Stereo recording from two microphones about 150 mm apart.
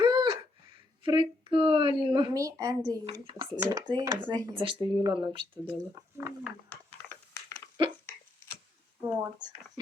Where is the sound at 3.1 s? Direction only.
35° right (ahead or behind).